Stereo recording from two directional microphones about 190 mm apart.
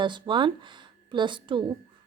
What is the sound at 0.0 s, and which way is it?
A woman's voice, 25° right (ahead or behind).